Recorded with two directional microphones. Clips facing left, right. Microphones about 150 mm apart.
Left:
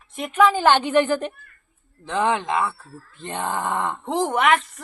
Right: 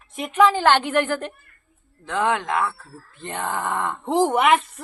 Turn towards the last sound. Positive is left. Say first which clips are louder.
# right 2 dB
turn(degrees=-5)  # may be behind; listen again after turning